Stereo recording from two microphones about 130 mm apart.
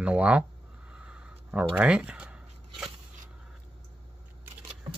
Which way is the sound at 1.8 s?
10° right (ahead or behind).